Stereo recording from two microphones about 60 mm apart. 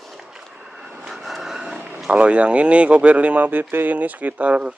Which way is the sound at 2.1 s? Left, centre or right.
Right.